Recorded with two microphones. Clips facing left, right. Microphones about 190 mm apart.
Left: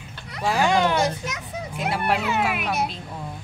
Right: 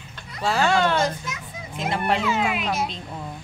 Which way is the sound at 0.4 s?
15° left (ahead or behind).